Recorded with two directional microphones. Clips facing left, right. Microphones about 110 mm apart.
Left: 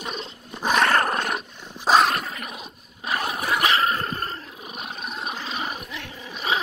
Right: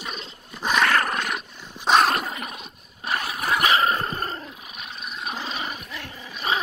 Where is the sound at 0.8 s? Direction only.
35° left (ahead or behind).